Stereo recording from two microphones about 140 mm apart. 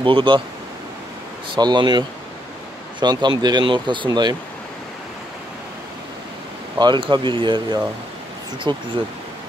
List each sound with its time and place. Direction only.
0.0 s speech: 35° right (ahead or behind)
1.5 s speech: 35° right (ahead or behind)
6.8 s speech: 30° right (ahead or behind)